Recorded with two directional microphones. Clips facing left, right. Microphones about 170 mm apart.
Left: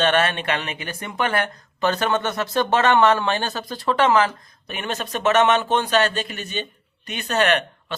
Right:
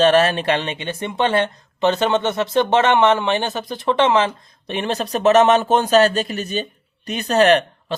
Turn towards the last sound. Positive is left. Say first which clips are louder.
# right 6 dB
turn(degrees=-35)  # may be behind; listen again after turning